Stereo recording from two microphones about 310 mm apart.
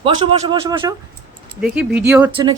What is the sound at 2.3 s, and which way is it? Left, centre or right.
Speech, centre.